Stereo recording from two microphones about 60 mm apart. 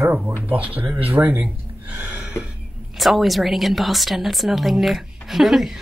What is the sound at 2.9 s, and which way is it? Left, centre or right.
A woman's voice, centre.